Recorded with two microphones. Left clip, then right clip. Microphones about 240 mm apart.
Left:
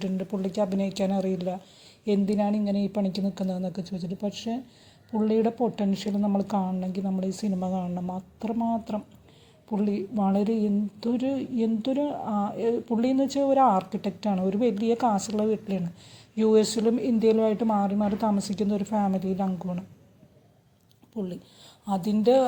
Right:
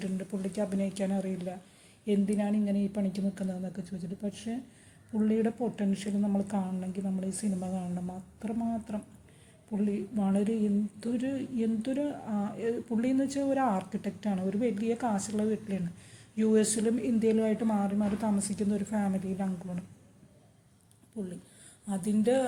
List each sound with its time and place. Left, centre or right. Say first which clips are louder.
0.0 s speech: left 6 dB; left
21.8 s speech: left 6 dB; left